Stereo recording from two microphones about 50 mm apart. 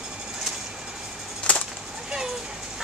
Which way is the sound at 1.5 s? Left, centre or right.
Centre.